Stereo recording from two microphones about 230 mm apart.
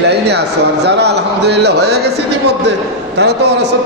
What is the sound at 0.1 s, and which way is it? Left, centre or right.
A man's voice, right.